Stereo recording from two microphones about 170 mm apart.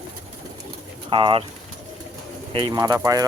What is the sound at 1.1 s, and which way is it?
Speech, 30° right (ahead or behind).